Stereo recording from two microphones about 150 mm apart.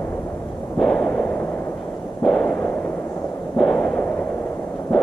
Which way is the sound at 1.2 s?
15° left (ahead or behind).